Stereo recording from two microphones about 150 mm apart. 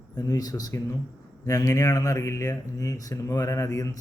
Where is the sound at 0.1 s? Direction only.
25° left (ahead or behind).